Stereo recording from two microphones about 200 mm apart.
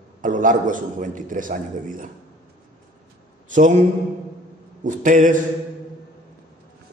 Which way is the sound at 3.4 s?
40° right (ahead or behind).